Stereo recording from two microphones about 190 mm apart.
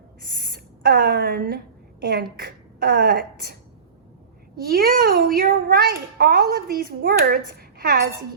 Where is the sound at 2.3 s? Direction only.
50° right (ahead or behind).